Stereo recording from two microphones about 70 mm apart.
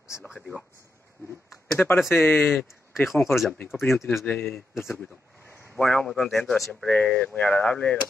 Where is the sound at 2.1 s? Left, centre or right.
Left.